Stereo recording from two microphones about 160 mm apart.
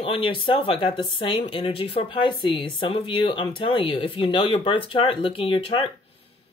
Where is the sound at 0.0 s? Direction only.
35° left (ahead or behind).